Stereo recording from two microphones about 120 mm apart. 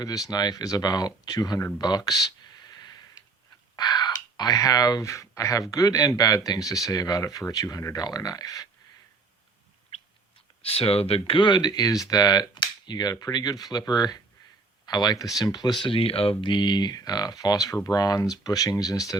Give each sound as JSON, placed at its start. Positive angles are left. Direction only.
{"t": 0.0, "sound": "speech", "side_deg": 30}
{"t": 1.8, "sound": "a sound", "side_deg": 35}
{"t": 3.8, "sound": "speech", "side_deg": 35}
{"t": 10.6, "sound": "speech", "side_deg": 55}
{"t": 15.8, "sound": "speech", "side_deg": 50}
{"t": 16.4, "sound": "speech", "side_deg": 40}